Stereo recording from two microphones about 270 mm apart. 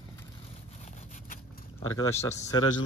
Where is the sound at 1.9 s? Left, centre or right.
Centre.